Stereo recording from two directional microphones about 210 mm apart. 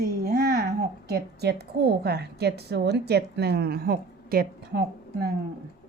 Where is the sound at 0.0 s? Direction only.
45° right (ahead or behind).